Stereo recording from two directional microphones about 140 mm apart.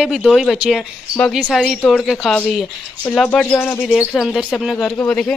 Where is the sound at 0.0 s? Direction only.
Centre (ahead or behind).